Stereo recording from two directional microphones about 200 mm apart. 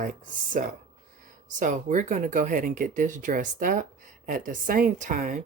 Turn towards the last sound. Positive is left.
turn(degrees=-40)  # may be behind; listen again after turning